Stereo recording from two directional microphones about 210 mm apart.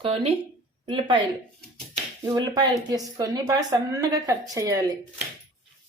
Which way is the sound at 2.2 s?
20° right (ahead or behind).